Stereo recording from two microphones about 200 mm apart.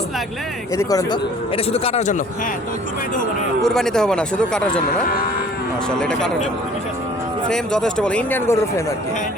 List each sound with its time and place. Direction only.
0.8 s speech: 15° left (ahead or behind); by 2.2 s 35° left (ahead or behind)
3.6 s speech: centre (ahead or behind)
7.5 s speech: 5° left (ahead or behind)